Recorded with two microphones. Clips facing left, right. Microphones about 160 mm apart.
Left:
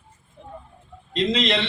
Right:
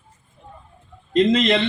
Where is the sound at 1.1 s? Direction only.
50° right (ahead or behind).